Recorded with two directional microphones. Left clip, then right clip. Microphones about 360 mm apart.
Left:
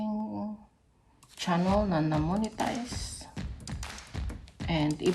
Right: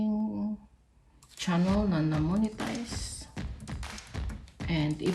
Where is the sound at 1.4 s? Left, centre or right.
Centre.